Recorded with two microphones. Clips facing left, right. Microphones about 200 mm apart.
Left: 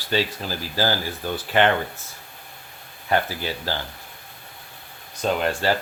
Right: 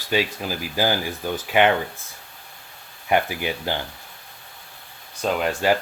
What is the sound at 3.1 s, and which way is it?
Speech, 15° right (ahead or behind).